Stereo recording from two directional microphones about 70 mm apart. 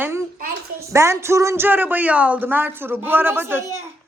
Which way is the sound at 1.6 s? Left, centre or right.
Right.